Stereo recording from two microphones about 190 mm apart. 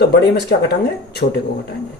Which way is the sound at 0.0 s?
60° left (ahead or behind).